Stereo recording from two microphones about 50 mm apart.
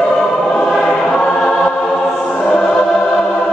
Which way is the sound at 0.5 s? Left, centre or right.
Centre.